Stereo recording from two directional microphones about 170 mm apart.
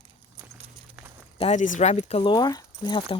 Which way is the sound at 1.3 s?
35° left (ahead or behind).